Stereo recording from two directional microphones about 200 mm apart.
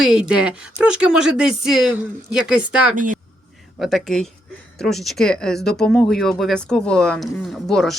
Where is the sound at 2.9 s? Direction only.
40° right (ahead or behind).